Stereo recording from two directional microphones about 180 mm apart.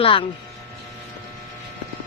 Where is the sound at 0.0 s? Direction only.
30° left (ahead or behind).